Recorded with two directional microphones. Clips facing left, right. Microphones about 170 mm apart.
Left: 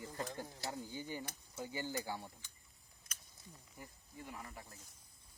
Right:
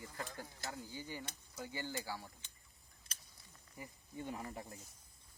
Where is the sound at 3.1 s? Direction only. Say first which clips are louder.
Even; 30° right (ahead or behind).